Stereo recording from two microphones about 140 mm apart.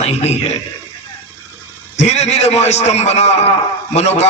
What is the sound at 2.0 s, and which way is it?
A man's voice, 50° left (ahead or behind).